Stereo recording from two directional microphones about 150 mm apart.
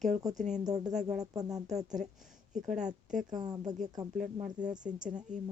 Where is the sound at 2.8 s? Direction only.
55° right (ahead or behind).